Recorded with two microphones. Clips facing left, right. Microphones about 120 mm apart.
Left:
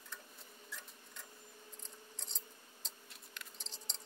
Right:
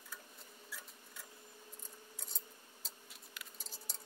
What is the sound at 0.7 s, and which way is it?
Sewing machine, 5° right (ahead or behind).